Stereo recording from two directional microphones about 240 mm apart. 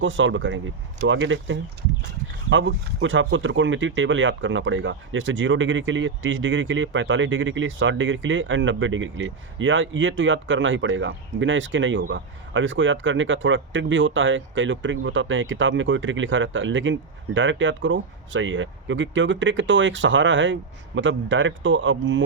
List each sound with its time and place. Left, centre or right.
0.0 s speech: right